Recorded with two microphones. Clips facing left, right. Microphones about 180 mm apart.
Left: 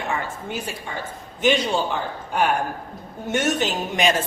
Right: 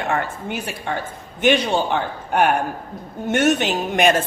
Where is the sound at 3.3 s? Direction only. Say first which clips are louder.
Right 4 dB; 60° right (ahead or behind).